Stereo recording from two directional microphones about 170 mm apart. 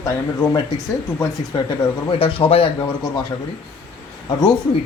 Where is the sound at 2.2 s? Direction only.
30° left (ahead or behind).